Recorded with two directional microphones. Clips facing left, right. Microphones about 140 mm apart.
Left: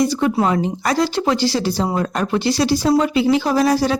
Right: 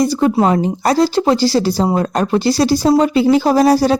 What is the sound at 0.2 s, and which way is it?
Speech, 30° right (ahead or behind).